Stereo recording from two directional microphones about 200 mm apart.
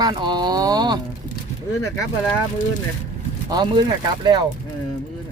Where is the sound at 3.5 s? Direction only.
20° right (ahead or behind).